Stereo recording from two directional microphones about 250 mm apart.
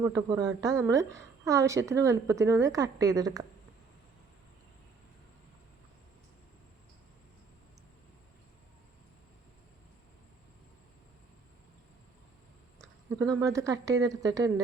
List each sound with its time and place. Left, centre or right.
0.0 s a woman's voice: centre
13.1 s a woman's voice: centre